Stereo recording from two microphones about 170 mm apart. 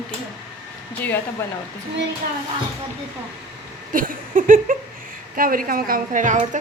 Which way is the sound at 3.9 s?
55° right (ahead or behind).